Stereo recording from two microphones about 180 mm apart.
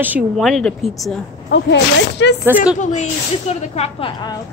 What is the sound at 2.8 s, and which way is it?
Speech, 40° left (ahead or behind).